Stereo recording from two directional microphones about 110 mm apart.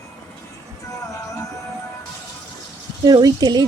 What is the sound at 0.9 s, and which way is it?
Music, 30° left (ahead or behind).